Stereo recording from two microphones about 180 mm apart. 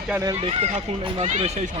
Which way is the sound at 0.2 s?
20° right (ahead or behind).